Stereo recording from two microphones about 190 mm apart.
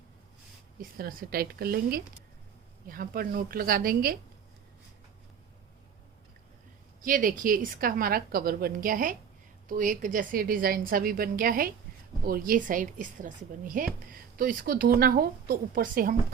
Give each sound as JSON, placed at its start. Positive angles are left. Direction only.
{"t": 0.8, "sound": "a woman's voice", "side_deg": -50}
{"t": 7.0, "sound": "a woman's voice", "side_deg": -45}